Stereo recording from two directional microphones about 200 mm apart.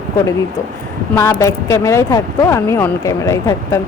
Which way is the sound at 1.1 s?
15° left (ahead or behind).